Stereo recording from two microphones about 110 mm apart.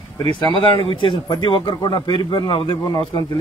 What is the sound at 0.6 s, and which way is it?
Speech, 50° left (ahead or behind).